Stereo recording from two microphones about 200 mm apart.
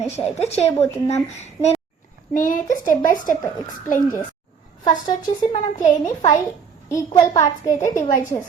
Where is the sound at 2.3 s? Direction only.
45° left (ahead or behind).